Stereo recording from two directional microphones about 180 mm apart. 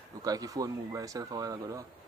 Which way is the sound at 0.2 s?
20° right (ahead or behind).